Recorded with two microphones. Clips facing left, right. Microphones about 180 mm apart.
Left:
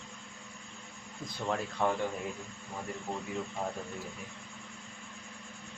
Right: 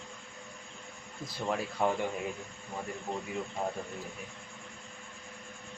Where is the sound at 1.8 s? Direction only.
15° right (ahead or behind).